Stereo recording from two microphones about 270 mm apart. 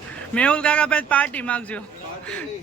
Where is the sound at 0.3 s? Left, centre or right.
Centre.